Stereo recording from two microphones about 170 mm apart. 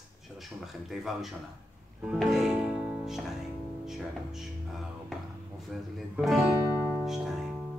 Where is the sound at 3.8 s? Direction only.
Centre (ahead or behind).